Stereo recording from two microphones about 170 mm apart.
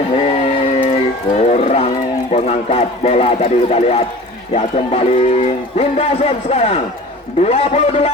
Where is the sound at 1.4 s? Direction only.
40° left (ahead or behind).